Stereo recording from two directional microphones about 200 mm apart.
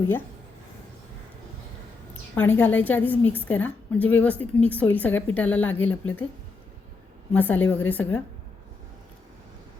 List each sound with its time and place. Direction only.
2.3 s a woman's voice: 10° left (ahead or behind)
7.3 s a woman's voice: 10° left (ahead or behind)